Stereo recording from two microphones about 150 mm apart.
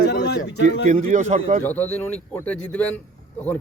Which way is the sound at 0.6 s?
55° right (ahead or behind).